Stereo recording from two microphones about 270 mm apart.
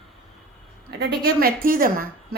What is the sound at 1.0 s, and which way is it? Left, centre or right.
A woman's voice, right.